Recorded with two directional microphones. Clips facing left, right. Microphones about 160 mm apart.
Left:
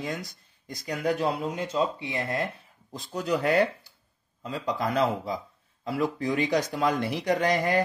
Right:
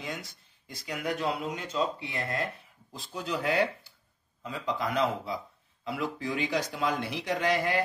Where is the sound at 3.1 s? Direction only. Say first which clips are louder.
Left 5 dB; 45° left (ahead or behind).